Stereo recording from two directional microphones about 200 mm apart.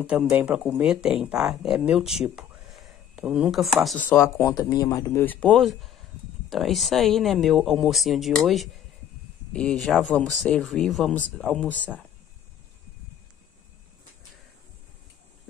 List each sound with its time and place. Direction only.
0.0 s speech: 5° right (ahead or behind)